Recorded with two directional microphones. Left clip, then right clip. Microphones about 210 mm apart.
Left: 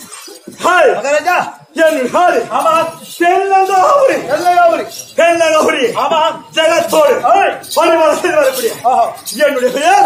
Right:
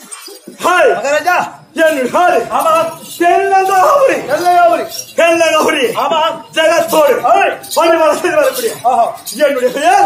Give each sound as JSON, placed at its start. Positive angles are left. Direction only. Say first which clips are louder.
{"t": 0.6, "sound": "a sound", "louder": "left 1 dB", "side_deg": 0}
{"t": 1.0, "sound": "speech", "louder": "even", "side_deg": -15}
{"t": 1.8, "sound": "a man's voice", "louder": "even", "side_deg": 0}
{"t": 2.5, "sound": "speech", "louder": "even", "side_deg": -15}
{"t": 4.3, "sound": "a man's voice", "louder": "right 1 dB", "side_deg": -5}
{"t": 5.1, "sound": "a man's voice", "louder": "even", "side_deg": -25}
{"t": 5.9, "sound": "a man's voice", "louder": "left 1 dB", "side_deg": 5}
{"t": 6.5, "sound": "speech", "louder": "right 1 dB", "side_deg": -15}
{"t": 7.2, "sound": "a man's voice", "louder": "even", "side_deg": 0}
{"t": 9.3, "sound": "speech", "louder": "even", "side_deg": 15}